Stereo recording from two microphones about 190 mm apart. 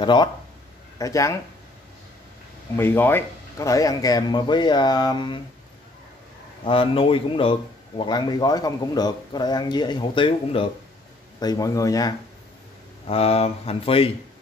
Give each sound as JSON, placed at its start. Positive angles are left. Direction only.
{"t": 0.0, "sound": "speech", "side_deg": 25}
{"t": 2.7, "sound": "speech", "side_deg": 10}
{"t": 6.6, "sound": "speech", "side_deg": 25}
{"t": 13.0, "sound": "speech", "side_deg": 30}